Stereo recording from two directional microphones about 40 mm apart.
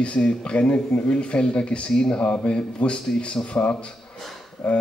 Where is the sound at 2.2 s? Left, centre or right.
Left.